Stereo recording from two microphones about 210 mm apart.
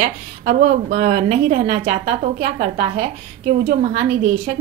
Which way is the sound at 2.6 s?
45° right (ahead or behind).